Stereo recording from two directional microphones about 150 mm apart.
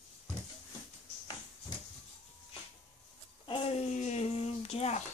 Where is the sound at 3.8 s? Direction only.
50° left (ahead or behind).